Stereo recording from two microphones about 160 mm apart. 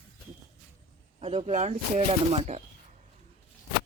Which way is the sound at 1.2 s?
40° right (ahead or behind).